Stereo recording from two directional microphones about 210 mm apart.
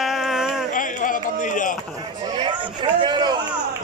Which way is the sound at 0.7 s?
40° left (ahead or behind).